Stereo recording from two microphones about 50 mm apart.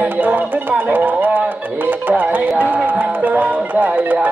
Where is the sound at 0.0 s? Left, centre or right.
Right.